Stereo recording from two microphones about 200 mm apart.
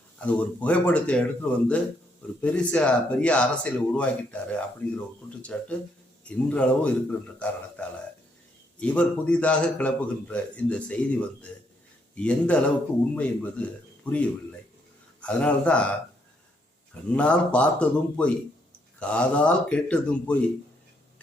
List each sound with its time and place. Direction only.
0.2 s a man's voice: 5° left (ahead or behind)
17.1 s speech: 5° left (ahead or behind)